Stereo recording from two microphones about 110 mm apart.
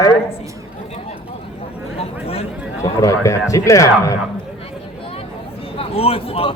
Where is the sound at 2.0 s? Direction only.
65° left (ahead or behind).